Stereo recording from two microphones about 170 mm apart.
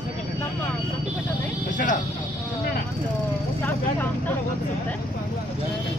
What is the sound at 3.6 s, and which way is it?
Speech, 15° left (ahead or behind).